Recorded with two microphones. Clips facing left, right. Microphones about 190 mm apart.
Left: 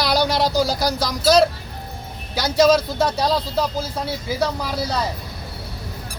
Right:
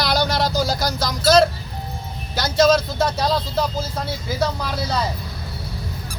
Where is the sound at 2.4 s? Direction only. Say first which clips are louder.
Left 1 dB; 10° left (ahead or behind).